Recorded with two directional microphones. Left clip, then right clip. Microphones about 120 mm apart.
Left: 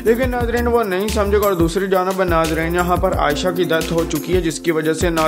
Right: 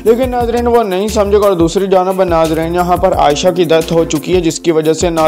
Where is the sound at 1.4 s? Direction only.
30° right (ahead or behind).